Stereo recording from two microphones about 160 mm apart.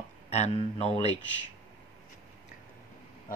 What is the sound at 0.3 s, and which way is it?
Speech, 40° left (ahead or behind).